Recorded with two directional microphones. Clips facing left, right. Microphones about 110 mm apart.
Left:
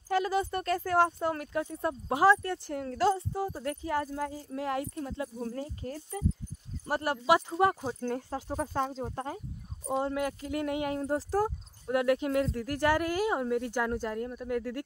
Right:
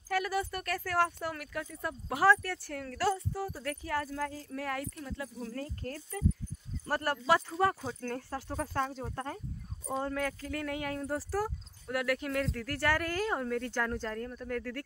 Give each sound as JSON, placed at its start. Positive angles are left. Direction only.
{"t": 0.1, "sound": "speech", "side_deg": 25}